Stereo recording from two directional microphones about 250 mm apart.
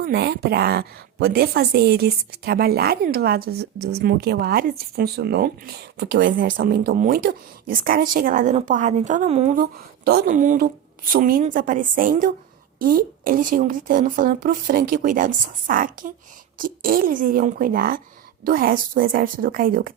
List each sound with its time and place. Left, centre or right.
0.0 s a woman's voice: right